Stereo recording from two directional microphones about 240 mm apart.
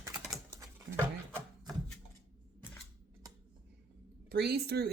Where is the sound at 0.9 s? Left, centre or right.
Right.